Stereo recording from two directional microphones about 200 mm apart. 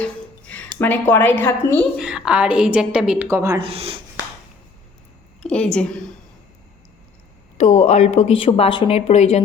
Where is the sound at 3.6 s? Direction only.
30° right (ahead or behind).